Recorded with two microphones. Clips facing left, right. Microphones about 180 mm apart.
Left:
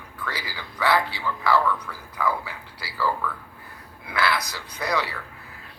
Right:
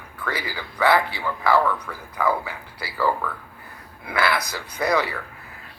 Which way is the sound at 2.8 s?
55° right (ahead or behind).